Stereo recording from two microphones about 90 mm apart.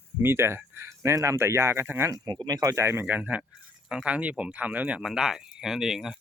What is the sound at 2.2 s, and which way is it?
Speech, 55° right (ahead or behind).